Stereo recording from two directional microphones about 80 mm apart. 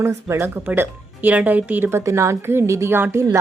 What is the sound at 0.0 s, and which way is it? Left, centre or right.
A woman's voice, right.